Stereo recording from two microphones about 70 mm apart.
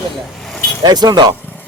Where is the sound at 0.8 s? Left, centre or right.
Right.